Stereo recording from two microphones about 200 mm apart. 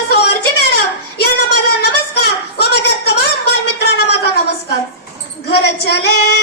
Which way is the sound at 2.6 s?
55° left (ahead or behind).